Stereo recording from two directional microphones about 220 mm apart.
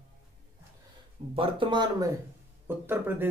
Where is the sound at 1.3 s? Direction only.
20° right (ahead or behind).